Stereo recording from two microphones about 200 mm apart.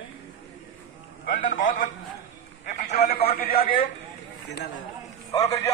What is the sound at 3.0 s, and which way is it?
Speech, 50° left (ahead or behind).